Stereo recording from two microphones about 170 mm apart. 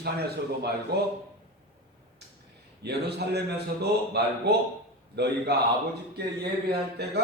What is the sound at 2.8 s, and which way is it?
A man's voice, 75° right (ahead or behind).